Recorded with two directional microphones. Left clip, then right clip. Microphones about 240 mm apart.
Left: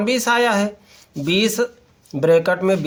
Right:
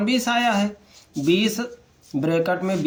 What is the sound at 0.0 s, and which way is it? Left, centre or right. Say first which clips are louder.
Speech: left 4 dB; left.